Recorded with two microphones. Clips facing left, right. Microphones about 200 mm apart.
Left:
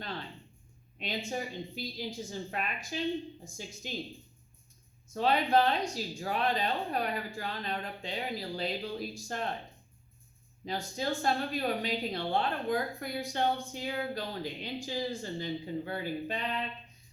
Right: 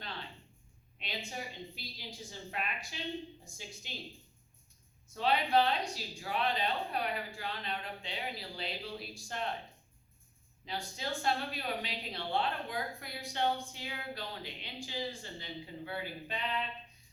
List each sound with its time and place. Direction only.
0.9 s speech: 45° left (ahead or behind)
5.0 s speech: 45° left (ahead or behind)
10.7 s speech: 45° left (ahead or behind)